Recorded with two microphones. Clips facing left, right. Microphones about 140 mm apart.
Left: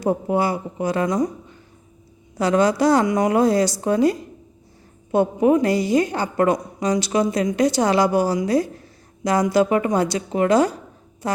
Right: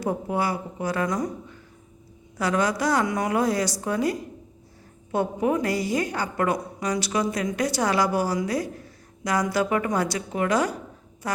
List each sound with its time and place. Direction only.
0.0 s a woman's voice: 25° left (ahead or behind)
2.4 s a woman's voice: 25° left (ahead or behind)